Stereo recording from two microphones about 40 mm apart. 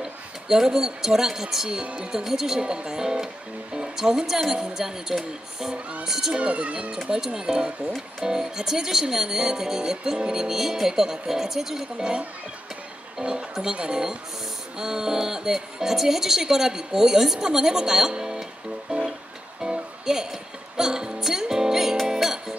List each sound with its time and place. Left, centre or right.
0.0 s speech: centre
6.4 s speech: right; by 12.1 s centre
13.2 s speech: right
19.6 s music: right
20.1 s music: centre